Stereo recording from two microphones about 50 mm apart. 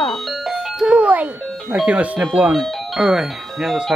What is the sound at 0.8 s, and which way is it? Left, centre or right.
Music, right.